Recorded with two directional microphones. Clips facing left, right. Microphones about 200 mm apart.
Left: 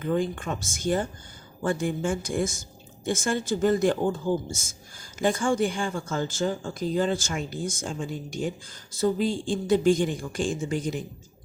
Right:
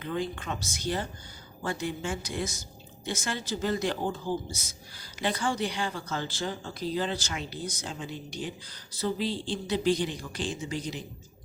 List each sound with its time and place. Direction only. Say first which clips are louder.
0.0 s speech: left 6 dB; 50° left (ahead or behind)